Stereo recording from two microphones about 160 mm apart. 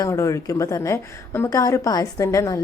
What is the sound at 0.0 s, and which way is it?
A woman's voice, 20° left (ahead or behind).